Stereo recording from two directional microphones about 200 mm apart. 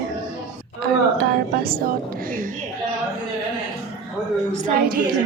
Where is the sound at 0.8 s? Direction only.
50° right (ahead or behind).